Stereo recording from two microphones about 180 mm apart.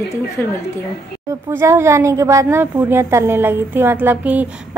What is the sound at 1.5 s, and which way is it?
A woman's voice, 15° right (ahead or behind).